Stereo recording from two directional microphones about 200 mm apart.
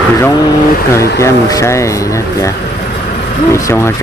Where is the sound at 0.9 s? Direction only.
15° left (ahead or behind).